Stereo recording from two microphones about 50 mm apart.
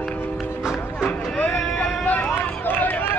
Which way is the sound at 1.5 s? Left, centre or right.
Centre.